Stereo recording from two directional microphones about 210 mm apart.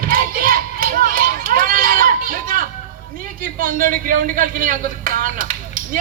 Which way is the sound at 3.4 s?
40° right (ahead or behind).